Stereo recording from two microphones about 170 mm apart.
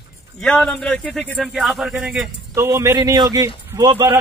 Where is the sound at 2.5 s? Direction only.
15° right (ahead or behind).